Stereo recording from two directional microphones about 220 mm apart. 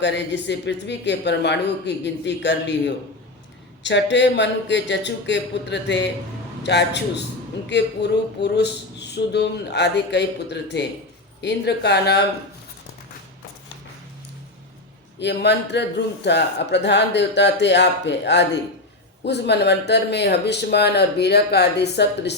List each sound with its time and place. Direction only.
0.0 s speech: 55° left (ahead or behind)
15.2 s speech: 50° left (ahead or behind)